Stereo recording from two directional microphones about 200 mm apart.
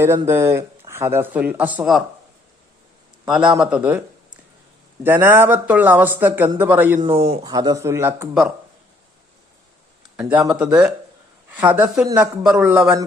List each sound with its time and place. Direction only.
0.0 s speech: 15° right (ahead or behind)
3.2 s speech: centre (ahead or behind)
5.0 s speech: 10° right (ahead or behind)
7.4 s speech: 20° right (ahead or behind)
10.2 s speech: 5° right (ahead or behind)